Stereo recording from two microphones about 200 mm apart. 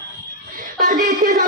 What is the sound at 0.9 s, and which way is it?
Speech, 40° right (ahead or behind).